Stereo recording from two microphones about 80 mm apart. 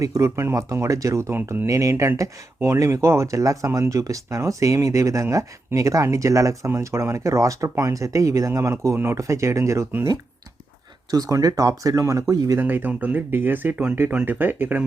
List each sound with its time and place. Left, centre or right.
0.0 s speech: right
11.1 s speech: right
12.5 s speech: right